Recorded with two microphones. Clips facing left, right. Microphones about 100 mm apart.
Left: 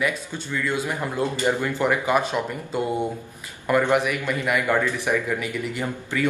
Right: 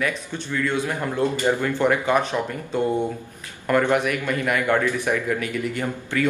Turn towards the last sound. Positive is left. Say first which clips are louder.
# right 1 dB
turn(degrees=10)  # may be behind; listen again after turning